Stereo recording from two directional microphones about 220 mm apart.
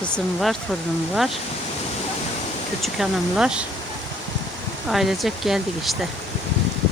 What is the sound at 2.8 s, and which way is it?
Speech, centre (ahead or behind).